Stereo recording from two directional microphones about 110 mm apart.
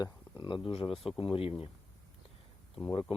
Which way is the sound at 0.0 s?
45° left (ahead or behind).